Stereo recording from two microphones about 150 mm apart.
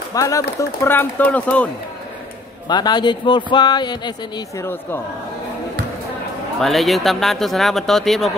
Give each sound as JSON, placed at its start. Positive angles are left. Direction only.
{"t": 0.1, "sound": "speech", "side_deg": 20}
{"t": 2.7, "sound": "speech", "side_deg": 30}
{"t": 4.6, "sound": "speech", "side_deg": 15}
{"t": 6.6, "sound": "speech", "side_deg": 0}